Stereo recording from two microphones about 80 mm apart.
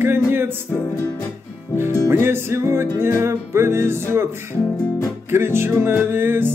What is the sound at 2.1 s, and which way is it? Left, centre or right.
Music, right.